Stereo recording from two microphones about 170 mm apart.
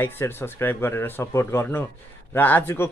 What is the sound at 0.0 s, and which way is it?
Speech, 10° left (ahead or behind).